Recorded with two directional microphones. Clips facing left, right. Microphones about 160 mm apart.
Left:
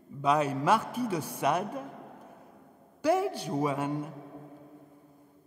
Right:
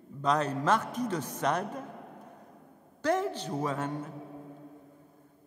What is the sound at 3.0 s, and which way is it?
A woman's voice, 10° left (ahead or behind).